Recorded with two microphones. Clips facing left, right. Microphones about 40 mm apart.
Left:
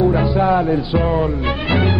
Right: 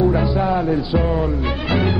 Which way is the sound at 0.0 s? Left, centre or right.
Centre.